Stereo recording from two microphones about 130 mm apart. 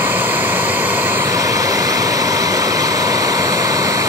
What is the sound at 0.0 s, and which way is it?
Vehicle, 15° right (ahead or behind).